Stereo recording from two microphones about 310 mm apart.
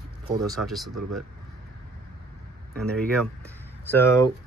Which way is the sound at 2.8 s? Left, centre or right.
Centre.